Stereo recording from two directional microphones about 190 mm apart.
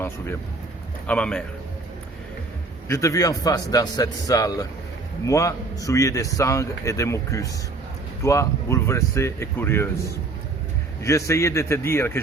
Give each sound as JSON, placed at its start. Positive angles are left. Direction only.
{"t": 1.0, "sound": "a man's voice", "side_deg": 5}
{"t": 2.9, "sound": "a man's voice", "side_deg": 15}
{"t": 11.0, "sound": "a man's voice", "side_deg": 15}